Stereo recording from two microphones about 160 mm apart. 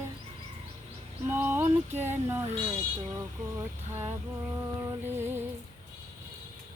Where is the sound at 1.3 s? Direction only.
10° right (ahead or behind).